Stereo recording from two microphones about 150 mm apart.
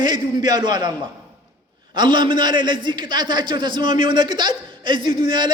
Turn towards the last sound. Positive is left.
turn(degrees=-30)  # may be behind; listen again after turning